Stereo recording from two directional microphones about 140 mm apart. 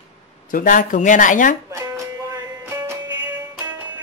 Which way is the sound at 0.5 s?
75° left (ahead or behind).